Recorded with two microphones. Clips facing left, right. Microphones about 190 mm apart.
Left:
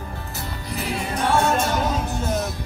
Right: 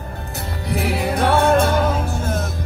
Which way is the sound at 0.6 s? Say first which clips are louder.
Right 7 dB; 65° right (ahead or behind).